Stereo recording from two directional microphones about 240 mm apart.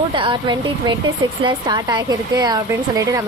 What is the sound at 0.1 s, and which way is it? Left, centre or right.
A woman's voice, right.